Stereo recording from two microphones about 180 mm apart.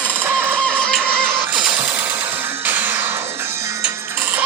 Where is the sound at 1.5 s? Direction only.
5° right (ahead or behind).